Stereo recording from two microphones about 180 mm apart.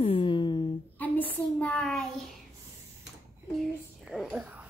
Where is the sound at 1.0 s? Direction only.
10° left (ahead or behind).